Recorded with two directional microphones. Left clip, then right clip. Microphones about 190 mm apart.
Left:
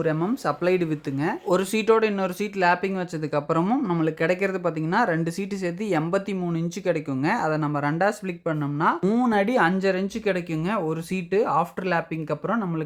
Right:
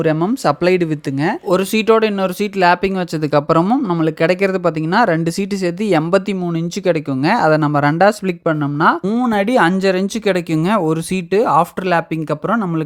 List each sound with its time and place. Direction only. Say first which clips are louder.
0.0 s speech: right 9 dB; 35° right (ahead or behind)
3.6 s speech: right 8 dB; 25° right (ahead or behind)
9.0 s speech: right 5 dB; 20° right (ahead or behind); by 12.8 s 35° right (ahead or behind)